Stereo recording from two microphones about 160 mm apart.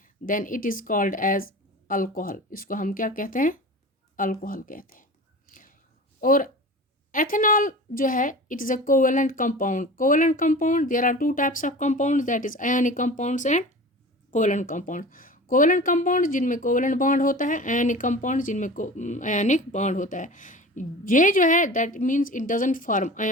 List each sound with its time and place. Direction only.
0.0 s a woman's voice: 55° left (ahead or behind)
5.5 s a sound: 60° left (ahead or behind)
6.1 s a woman's voice: 60° left (ahead or behind)